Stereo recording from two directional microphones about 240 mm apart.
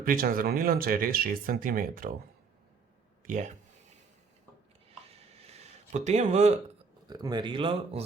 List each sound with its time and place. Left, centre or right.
0.0 s speech: right
3.2 s speech: right
5.3 s a sound: right
7.1 s speech: centre